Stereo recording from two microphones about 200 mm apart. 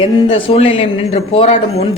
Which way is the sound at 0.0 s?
25° left (ahead or behind).